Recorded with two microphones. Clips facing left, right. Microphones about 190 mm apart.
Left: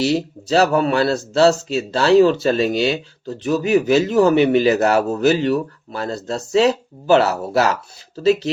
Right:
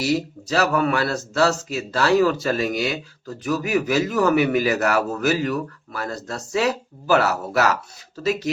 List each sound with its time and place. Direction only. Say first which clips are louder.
0.0 s speech: left 3 dB; 30° left (ahead or behind)